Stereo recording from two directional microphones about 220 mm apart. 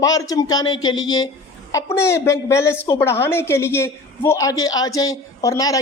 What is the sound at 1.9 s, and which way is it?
A woman's voice, 10° left (ahead or behind).